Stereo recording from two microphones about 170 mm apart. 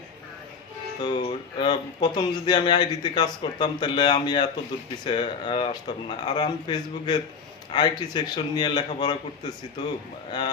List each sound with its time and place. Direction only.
1.0 s speech: 30° left (ahead or behind)